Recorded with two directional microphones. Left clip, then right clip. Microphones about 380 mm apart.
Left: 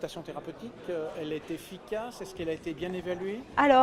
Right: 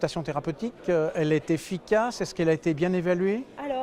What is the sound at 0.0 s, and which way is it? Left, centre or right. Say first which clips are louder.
Speech: right 9 dB; right.